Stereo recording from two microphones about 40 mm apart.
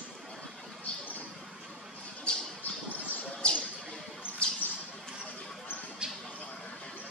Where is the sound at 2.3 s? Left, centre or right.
Left.